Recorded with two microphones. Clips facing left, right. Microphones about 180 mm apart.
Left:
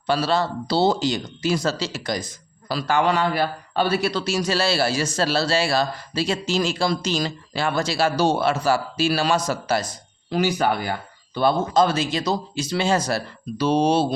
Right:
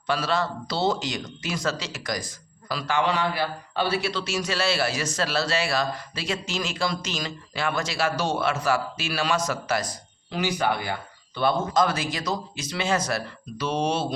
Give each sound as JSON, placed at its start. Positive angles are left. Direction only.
{"t": 0.1, "sound": "a man's voice", "side_deg": 30}
{"t": 2.7, "sound": "a man's voice", "side_deg": 40}
{"t": 10.3, "sound": "a man's voice", "side_deg": 40}